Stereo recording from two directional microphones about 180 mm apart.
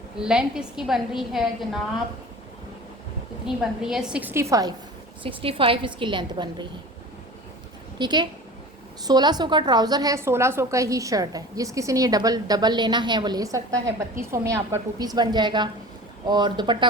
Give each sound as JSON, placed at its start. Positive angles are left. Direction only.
{"t": 0.2, "sound": "a woman's voice", "side_deg": -5}
{"t": 3.4, "sound": "a woman's voice", "side_deg": -5}
{"t": 5.2, "sound": "a woman's voice", "side_deg": -30}
{"t": 7.9, "sound": "a woman's voice", "side_deg": -25}